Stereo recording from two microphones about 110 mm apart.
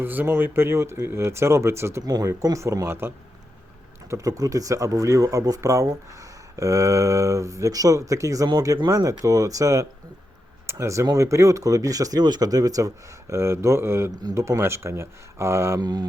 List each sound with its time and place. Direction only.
0.0 s speech: 20° right (ahead or behind)
4.1 s speech: 30° right (ahead or behind)
14.1 s speech: 35° right (ahead or behind)
14.3 s speech: 25° right (ahead or behind)
15.8 s speech: 40° right (ahead or behind)